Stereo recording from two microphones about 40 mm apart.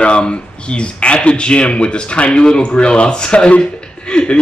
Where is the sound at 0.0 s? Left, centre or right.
Left.